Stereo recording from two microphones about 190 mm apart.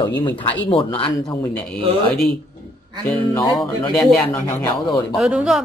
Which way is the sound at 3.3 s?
20° left (ahead or behind).